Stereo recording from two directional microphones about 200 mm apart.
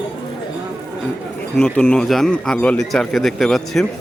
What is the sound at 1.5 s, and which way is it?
A man's voice, 5° left (ahead or behind).